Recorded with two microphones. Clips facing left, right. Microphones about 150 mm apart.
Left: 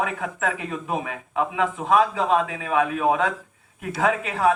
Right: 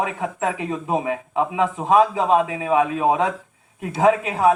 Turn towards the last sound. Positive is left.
turn(degrees=-30)  # may be behind; listen again after turning